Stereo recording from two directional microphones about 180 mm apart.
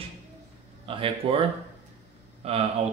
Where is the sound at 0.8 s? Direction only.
30° right (ahead or behind).